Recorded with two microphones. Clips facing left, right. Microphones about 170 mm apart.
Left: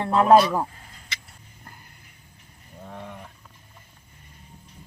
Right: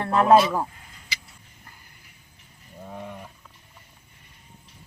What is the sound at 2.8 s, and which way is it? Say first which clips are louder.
Wild animals: right 2 dB; 10° right (ahead or behind).